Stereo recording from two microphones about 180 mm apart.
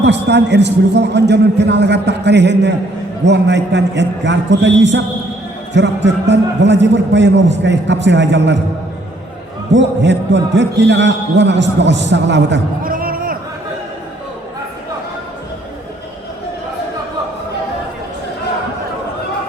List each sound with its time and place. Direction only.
0.0 s a man's voice: 70° right (ahead or behind)
9.7 s a man's voice: 80° right
12.8 s a sound: 55° right (ahead or behind)